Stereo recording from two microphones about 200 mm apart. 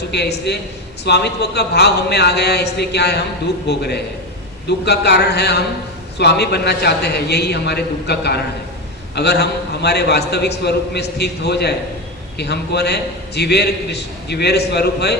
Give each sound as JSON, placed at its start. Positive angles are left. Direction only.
{"t": 0.1, "sound": "a man's voice", "side_deg": 55}